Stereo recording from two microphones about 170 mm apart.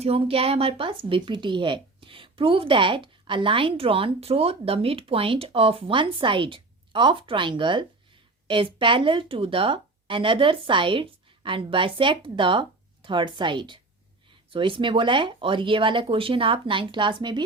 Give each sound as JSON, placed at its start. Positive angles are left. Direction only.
{"t": 0.0, "sound": "a woman's voice", "side_deg": -35}